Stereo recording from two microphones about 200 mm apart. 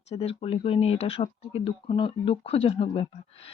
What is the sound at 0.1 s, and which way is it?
Speech, 30° left (ahead or behind).